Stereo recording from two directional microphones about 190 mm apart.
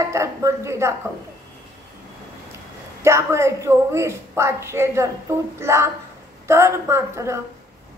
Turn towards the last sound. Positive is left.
turn(degrees=-15)  # may be behind; listen again after turning